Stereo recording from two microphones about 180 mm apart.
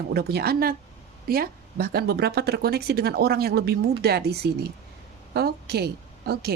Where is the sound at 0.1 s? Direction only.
65° right (ahead or behind).